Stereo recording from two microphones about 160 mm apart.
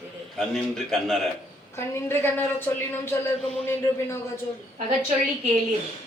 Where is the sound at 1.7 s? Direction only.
15° left (ahead or behind).